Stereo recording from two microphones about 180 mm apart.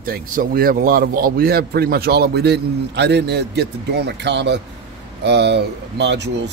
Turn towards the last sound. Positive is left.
turn(degrees=-70)  # may be behind; listen again after turning